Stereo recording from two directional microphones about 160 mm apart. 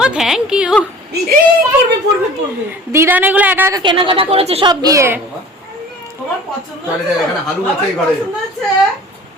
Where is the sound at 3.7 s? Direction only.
30° right (ahead or behind).